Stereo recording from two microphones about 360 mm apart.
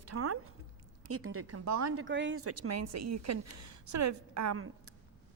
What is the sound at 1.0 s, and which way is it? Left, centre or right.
A woman's voice, right.